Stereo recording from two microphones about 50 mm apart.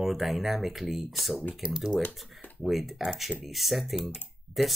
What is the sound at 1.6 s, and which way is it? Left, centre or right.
Speech, right.